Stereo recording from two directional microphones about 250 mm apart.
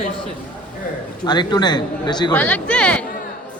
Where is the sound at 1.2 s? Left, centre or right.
Centre.